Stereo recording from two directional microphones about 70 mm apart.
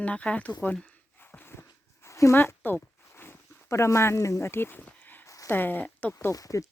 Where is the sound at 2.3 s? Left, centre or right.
Left.